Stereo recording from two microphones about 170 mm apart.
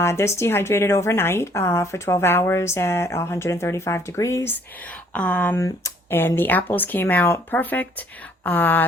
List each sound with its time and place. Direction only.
0.0 s a woman's voice: 15° left (ahead or behind)